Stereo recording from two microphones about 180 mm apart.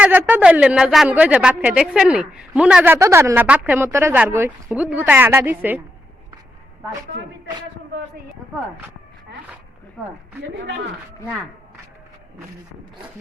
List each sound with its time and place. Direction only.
0.0 s a woman's voice: 10° right (ahead or behind)
10.6 s speech: 90° right